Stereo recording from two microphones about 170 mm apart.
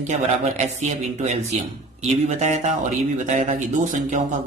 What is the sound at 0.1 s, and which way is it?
Speech, 45° right (ahead or behind).